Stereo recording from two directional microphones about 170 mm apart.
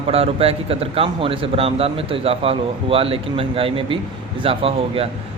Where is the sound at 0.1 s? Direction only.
35° right (ahead or behind).